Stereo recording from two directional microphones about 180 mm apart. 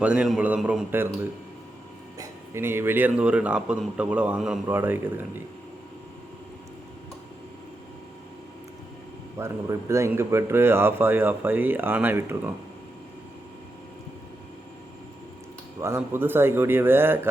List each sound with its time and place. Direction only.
0.0 s speech: 5° right (ahead or behind)
2.1 s speech: 15° right (ahead or behind)
9.4 s speech: 15° right (ahead or behind)
15.8 s speech: 15° right (ahead or behind)